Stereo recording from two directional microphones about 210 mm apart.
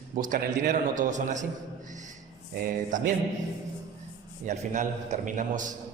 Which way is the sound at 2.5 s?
45° right (ahead or behind).